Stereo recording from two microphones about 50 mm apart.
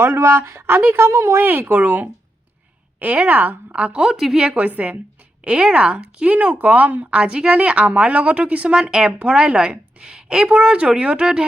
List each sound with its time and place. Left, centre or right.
0.0 s speech: right
1.4 s speech: right
3.7 s speech: right
4.2 s a woman's voice: centre
4.5 s speech: right
5.4 s speech: centre
8.7 s a woman's voice: centre